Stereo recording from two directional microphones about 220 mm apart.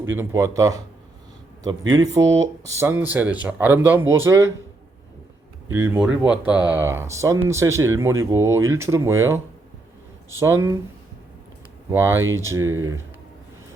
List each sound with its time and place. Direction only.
0.1 s speech: 10° right (ahead or behind)
1.9 s speech: 15° right (ahead or behind)
5.7 s speech: 10° right (ahead or behind)
10.4 s speech: 15° right (ahead or behind)
11.9 s speech: 10° right (ahead or behind)